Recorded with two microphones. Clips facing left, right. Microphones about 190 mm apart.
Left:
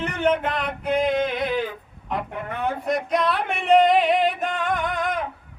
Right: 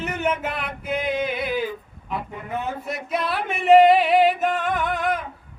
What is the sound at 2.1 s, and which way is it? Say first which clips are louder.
Speech: left 1 dB; 65° left (ahead or behind).